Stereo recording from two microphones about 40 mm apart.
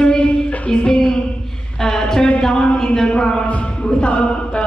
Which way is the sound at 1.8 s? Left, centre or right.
Centre.